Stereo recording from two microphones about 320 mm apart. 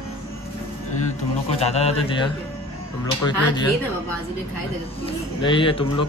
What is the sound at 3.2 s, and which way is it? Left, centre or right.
Speech, centre.